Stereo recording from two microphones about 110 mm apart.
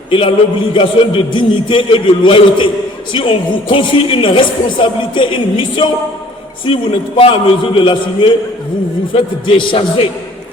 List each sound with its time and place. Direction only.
0.1 s a woman's voice: 55° left (ahead or behind)